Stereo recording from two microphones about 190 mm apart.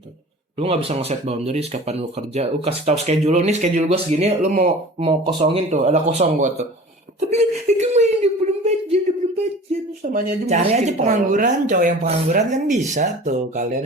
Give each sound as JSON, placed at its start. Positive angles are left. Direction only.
{"t": 0.6, "sound": "speech", "side_deg": -30}
{"t": 7.2, "sound": "a sound", "side_deg": -35}
{"t": 10.0, "sound": "speech", "side_deg": -45}